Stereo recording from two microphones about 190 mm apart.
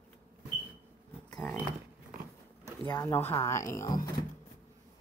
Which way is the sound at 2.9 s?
10° left (ahead or behind).